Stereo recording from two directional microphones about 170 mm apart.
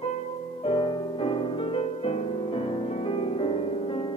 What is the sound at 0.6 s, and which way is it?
Music, 30° left (ahead or behind).